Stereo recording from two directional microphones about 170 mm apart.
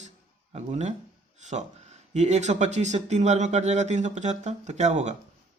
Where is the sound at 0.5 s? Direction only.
45° right (ahead or behind).